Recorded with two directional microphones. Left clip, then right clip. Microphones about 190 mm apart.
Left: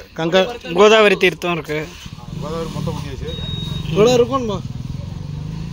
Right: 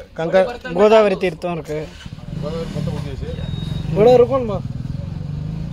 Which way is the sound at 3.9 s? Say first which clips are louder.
Right 2 dB; 55° left (ahead or behind).